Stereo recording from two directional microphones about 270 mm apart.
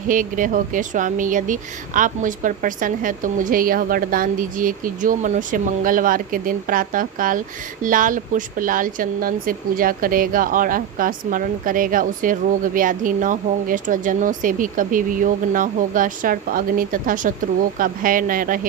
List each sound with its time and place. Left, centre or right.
0.1 s speech: right